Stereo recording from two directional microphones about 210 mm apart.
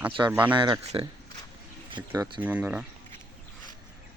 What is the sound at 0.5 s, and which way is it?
Speech, 20° right (ahead or behind).